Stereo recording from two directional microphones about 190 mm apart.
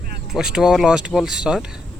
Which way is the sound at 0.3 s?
Centre (ahead or behind).